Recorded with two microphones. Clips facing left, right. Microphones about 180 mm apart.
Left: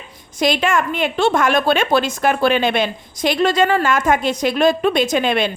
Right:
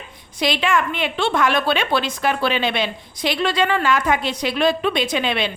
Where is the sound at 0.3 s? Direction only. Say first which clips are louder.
Left 3 dB; 45° left (ahead or behind).